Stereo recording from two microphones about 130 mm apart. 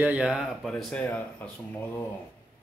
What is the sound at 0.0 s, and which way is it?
Speech, 10° right (ahead or behind).